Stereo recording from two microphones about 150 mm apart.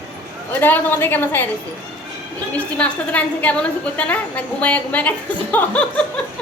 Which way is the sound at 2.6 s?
10° left (ahead or behind).